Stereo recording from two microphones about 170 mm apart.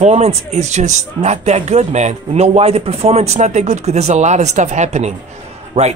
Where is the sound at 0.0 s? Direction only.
40° right (ahead or behind).